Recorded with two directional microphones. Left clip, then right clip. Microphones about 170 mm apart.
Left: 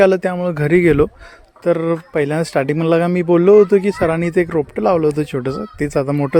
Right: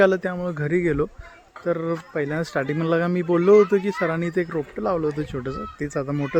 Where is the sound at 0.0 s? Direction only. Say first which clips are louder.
Left 6 dB; 40° left (ahead or behind).